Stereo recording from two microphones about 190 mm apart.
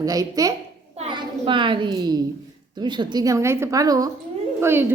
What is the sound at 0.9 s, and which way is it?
A child's voice, 30° right (ahead or behind).